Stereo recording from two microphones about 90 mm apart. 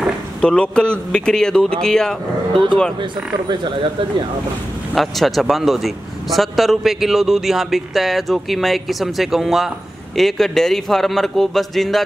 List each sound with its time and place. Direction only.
0.4 s a man's voice: 10° left (ahead or behind)
3.0 s speech: 60° right (ahead or behind)
4.9 s a man's voice: centre (ahead or behind)